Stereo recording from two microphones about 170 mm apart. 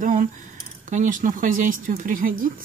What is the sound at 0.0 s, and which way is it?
Speech, 45° right (ahead or behind).